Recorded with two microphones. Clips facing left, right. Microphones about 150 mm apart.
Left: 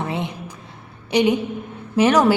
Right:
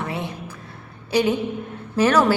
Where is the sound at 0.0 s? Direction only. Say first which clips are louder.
Left 2 dB; 20° left (ahead or behind).